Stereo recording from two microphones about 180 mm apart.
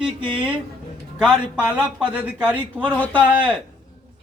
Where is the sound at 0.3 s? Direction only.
5° right (ahead or behind).